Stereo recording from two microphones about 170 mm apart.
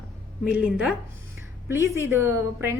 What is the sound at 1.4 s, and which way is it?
Speech, 15° right (ahead or behind).